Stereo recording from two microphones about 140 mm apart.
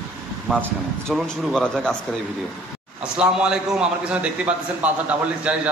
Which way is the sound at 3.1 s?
5° right (ahead or behind).